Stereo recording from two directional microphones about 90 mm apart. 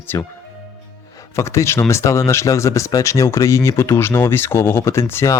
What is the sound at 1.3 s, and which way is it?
Speech, 35° left (ahead or behind).